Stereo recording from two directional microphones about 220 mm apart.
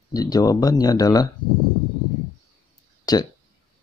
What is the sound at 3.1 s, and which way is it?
Speech, 15° left (ahead or behind).